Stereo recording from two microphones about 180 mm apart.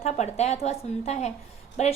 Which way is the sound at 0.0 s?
35° left (ahead or behind).